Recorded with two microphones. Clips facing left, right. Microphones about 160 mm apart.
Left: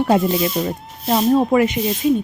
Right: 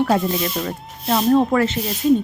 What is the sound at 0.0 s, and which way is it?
Speech, 15° left (ahead or behind).